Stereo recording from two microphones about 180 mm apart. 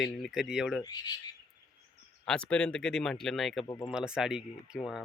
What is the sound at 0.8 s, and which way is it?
Speech, 20° left (ahead or behind).